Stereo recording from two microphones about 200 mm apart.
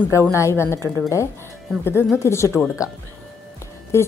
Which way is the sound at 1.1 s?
15° left (ahead or behind).